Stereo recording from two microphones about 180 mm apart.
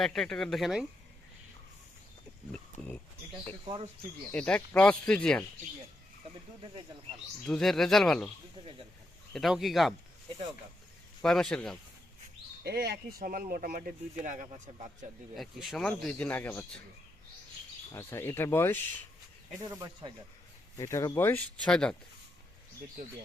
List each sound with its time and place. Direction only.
0.0 s speech: centre (ahead or behind)
2.5 s speech: 10° left (ahead or behind)
4.3 s speech: 5° left (ahead or behind)
7.4 s speech: 5° left (ahead or behind)
9.3 s speech: centre (ahead or behind)
11.2 s speech: 5° left (ahead or behind)
12.6 s speech: 60° right (ahead or behind)
14.2 s speech: 40° right (ahead or behind)
15.4 s speech: centre (ahead or behind)
17.9 s speech: 15° left (ahead or behind)
19.5 s speech: 20° right (ahead or behind)
20.7 s speech: 15° left (ahead or behind)